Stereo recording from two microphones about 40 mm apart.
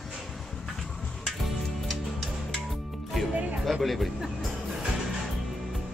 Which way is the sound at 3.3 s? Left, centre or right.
Right.